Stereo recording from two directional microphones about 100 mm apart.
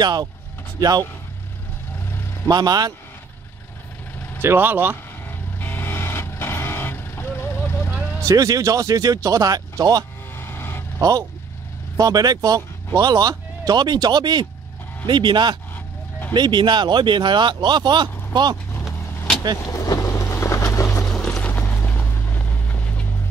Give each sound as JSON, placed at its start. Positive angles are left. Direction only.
{"t": 0.0, "sound": "speech", "side_deg": -45}
{"t": 2.4, "sound": "speech", "side_deg": -40}
{"t": 4.4, "sound": "speech", "side_deg": -20}
{"t": 5.6, "sound": "vehicle", "side_deg": 20}
{"t": 8.3, "sound": "speech", "side_deg": -35}
{"t": 10.3, "sound": "vehicle", "side_deg": 25}
{"t": 11.0, "sound": "speech", "side_deg": -35}
{"t": 19.6, "sound": "vehicle", "side_deg": 35}
{"t": 21.1, "sound": "music", "side_deg": 5}
{"t": 21.5, "sound": "vehicle", "side_deg": 20}